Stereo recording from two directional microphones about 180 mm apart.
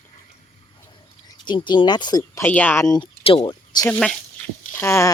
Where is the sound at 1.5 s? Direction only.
25° left (ahead or behind).